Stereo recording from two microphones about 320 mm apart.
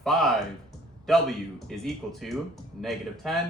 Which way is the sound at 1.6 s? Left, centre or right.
Centre.